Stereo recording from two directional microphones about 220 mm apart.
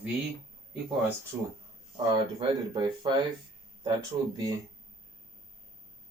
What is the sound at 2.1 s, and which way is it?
Speech, 20° right (ahead or behind).